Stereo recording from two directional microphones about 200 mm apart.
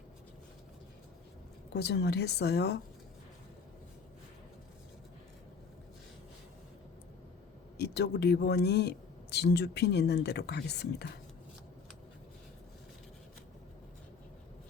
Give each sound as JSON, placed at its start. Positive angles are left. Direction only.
{"t": 1.7, "sound": "speech", "side_deg": 55}
{"t": 7.8, "sound": "speech", "side_deg": 55}